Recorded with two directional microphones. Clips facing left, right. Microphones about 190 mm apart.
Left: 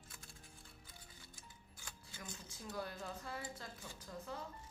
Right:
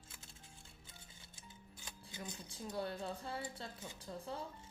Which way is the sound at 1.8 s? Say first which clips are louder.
Right 4 dB; 20° right (ahead or behind).